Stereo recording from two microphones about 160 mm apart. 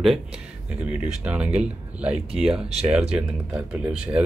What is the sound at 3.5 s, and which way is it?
Speech, 10° right (ahead or behind).